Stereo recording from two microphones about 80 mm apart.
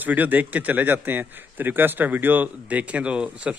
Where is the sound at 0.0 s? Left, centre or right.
Centre.